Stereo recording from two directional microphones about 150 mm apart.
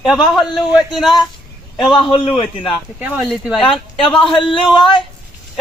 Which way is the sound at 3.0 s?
5° right (ahead or behind).